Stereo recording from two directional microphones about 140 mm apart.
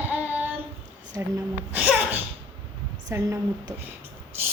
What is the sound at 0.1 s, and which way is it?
Child singing, 10° right (ahead or behind).